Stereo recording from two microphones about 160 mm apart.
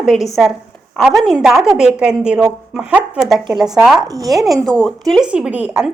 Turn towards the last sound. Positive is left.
turn(degrees=-5)  # may be behind; listen again after turning